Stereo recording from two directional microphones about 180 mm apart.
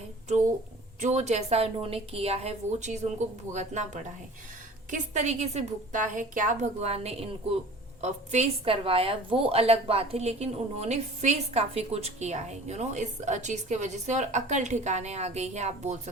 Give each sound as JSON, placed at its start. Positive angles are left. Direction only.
{"t": 0.3, "sound": "a woman's voice", "side_deg": -40}